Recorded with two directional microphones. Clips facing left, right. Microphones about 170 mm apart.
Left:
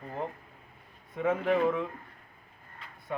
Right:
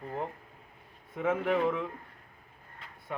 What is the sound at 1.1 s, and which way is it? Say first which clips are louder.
Speech: left 1 dB; 5° right (ahead or behind).